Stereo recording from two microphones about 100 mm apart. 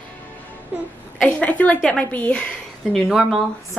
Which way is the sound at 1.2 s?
15° left (ahead or behind).